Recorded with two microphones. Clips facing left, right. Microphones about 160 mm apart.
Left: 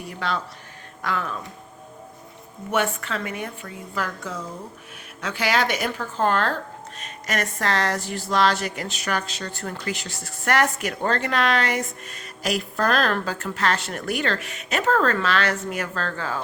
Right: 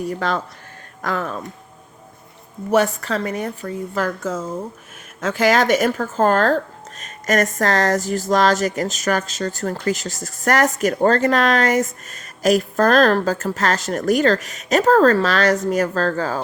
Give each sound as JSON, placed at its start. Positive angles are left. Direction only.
{"t": 0.0, "sound": "speech", "side_deg": -45}
{"t": 2.6, "sound": "a woman's voice", "side_deg": -40}